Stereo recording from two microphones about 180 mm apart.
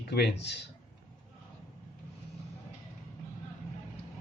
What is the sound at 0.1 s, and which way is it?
Speech, 65° left (ahead or behind).